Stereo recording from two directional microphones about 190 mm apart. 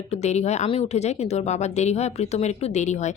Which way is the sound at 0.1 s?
35° left (ahead or behind).